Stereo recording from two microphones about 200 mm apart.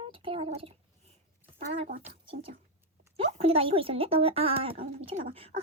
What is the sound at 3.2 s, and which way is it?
Speech, 30° right (ahead or behind).